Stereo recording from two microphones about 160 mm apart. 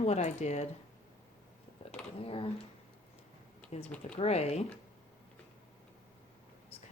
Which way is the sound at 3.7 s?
45° left (ahead or behind).